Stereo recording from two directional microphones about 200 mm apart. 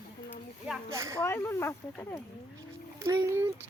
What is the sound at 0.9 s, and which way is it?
Speech, 15° right (ahead or behind).